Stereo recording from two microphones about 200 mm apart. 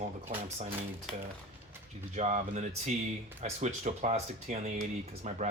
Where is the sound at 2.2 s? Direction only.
35° right (ahead or behind).